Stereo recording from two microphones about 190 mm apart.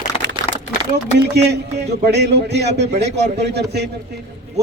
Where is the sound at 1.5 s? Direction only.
60° right (ahead or behind).